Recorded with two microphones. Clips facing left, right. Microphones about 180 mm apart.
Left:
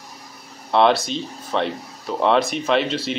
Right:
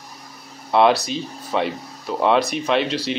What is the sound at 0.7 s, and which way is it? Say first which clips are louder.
Speech: right 1 dB; 5° right (ahead or behind).